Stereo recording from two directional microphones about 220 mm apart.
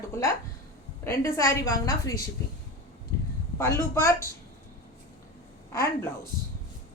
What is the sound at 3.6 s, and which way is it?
Speech, 10° left (ahead or behind).